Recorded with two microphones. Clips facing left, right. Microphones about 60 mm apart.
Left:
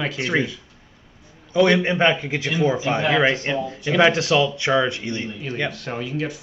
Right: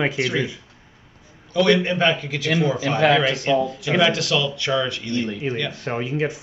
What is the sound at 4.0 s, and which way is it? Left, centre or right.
Speech, left.